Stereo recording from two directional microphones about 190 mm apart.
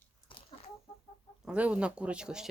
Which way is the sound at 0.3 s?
25° left (ahead or behind).